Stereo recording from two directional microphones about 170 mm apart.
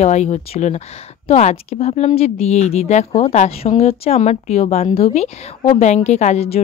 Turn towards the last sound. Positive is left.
turn(degrees=40)  # may be behind; listen again after turning